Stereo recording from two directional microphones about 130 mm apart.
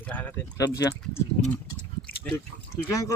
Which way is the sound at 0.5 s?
25° left (ahead or behind).